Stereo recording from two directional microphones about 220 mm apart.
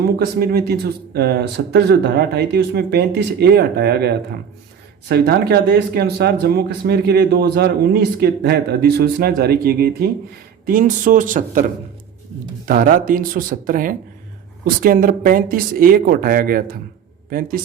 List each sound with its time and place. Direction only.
0.2 s speech: 45° right (ahead or behind)
12.6 s speech: 40° right (ahead or behind)